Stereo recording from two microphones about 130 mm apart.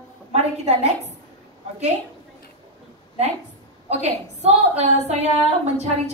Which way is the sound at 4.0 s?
55° right (ahead or behind).